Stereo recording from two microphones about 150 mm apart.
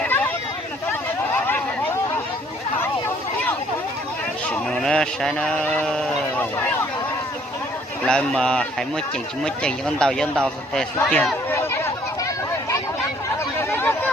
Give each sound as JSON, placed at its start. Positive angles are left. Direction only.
{"t": 0.0, "sound": "a sound", "side_deg": 10}
{"t": 4.4, "sound": "speech", "side_deg": 5}
{"t": 6.4, "sound": "speech", "side_deg": 15}
{"t": 8.0, "sound": "speech", "side_deg": 5}
{"t": 11.0, "sound": "a sound", "side_deg": 5}
{"t": 13.6, "sound": "chatter", "side_deg": 15}